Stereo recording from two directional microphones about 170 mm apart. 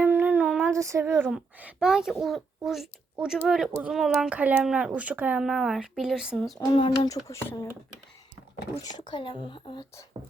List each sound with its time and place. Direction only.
0.0 s child singing: 10° right (ahead or behind)
0.7 s speech: 15° right (ahead or behind); by 6.6 s centre (ahead or behind)
6.7 s speech: 25° left (ahead or behind)
8.8 s speech: 25° left (ahead or behind)